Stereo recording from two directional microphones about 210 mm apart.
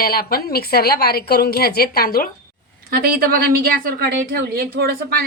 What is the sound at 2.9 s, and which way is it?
A woman's voice, 45° right (ahead or behind).